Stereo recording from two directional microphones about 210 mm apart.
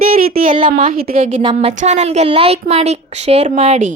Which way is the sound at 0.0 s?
45° right (ahead or behind).